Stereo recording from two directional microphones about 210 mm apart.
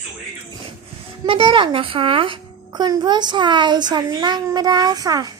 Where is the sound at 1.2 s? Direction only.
25° right (ahead or behind).